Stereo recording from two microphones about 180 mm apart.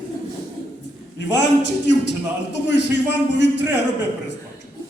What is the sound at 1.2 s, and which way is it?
A man's voice, 75° left (ahead or behind).